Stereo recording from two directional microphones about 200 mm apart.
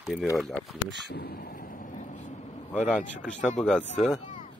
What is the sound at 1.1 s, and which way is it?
Vehicle, 50° left (ahead or behind).